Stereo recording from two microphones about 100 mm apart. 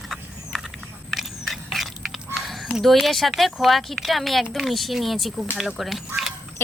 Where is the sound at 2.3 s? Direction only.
Centre (ahead or behind).